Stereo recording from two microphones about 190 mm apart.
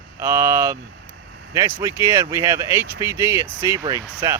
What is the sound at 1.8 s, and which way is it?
Speech, 15° right (ahead or behind).